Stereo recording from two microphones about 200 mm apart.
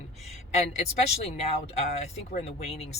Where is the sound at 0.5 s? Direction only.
30° left (ahead or behind).